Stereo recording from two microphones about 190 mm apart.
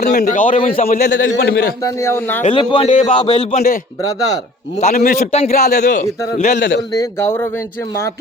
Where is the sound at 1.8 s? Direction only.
15° left (ahead or behind).